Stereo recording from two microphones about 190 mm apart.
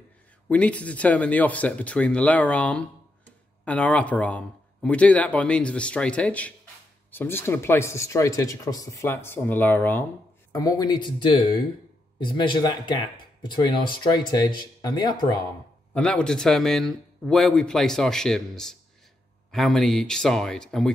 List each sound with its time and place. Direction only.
0.5 s speech: 5° left (ahead or behind)
15.9 s speech: 5° left (ahead or behind)